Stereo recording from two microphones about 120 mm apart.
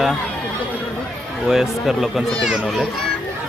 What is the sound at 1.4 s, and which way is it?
Speech, 5° right (ahead or behind).